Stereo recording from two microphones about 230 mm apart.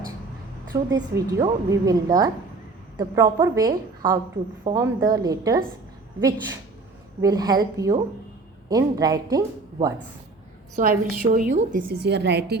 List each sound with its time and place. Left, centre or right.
0.7 s a woman's voice: centre
10.8 s a woman's voice: right